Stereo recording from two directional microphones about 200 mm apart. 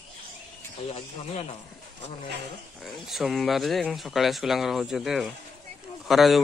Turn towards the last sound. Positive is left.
turn(degrees=0)  # may be behind; listen again after turning